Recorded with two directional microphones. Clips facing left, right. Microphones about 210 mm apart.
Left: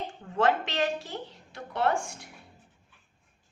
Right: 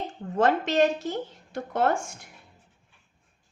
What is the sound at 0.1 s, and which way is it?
A woman's voice, 40° right (ahead or behind).